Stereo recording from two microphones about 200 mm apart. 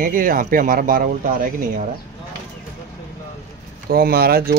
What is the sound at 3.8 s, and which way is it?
Speech, 50° right (ahead or behind).